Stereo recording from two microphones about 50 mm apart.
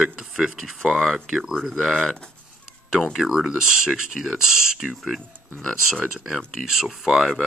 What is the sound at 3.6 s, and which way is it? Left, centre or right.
Speech, centre.